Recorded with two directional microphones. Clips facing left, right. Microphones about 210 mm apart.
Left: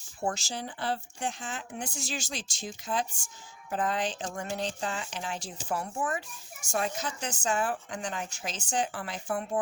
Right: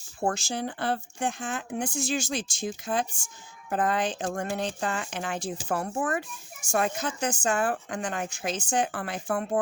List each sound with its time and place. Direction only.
0.3 s a woman's voice: 55° right (ahead or behind)